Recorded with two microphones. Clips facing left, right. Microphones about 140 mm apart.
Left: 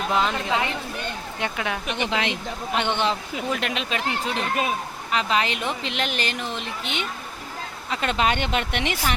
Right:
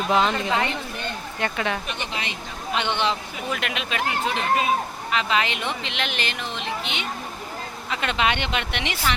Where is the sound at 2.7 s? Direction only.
50° left (ahead or behind).